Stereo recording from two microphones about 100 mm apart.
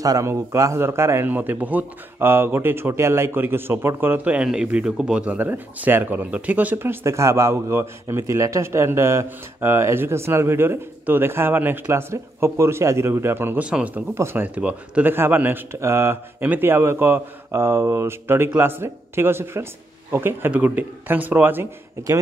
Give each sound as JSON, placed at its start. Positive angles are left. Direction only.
{"t": 0.0, "sound": "speech", "side_deg": -35}